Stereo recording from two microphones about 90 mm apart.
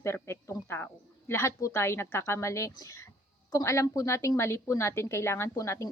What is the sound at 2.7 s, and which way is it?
Speech, 45° left (ahead or behind).